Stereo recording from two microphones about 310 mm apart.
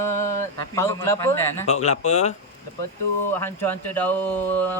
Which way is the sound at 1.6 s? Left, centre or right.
Left.